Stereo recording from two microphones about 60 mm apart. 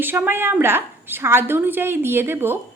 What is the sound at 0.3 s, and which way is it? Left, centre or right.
A woman's voice, right.